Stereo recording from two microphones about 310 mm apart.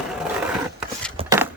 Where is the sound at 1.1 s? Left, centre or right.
Centre.